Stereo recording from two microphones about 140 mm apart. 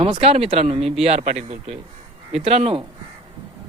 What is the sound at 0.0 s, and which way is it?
Speech, 45° right (ahead or behind).